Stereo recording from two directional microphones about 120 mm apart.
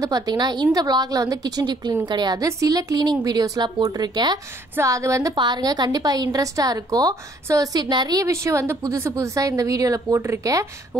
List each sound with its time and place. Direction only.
0.0 s a woman's voice: 35° right (ahead or behind)
5.3 s a woman's voice: 35° right (ahead or behind)